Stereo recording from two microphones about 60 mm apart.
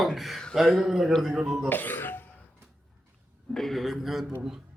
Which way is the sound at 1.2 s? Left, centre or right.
Centre.